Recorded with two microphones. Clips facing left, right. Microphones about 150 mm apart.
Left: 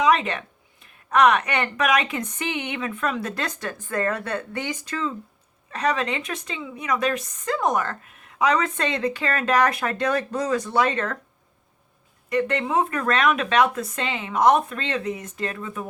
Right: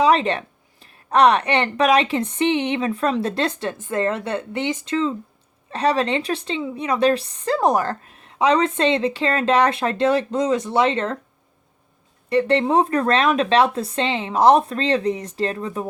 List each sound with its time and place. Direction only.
0.0 s a woman's voice: 30° right (ahead or behind)
12.3 s speech: 30° right (ahead or behind)